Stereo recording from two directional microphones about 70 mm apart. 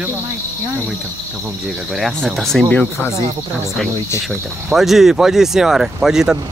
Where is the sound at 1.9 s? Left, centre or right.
Centre.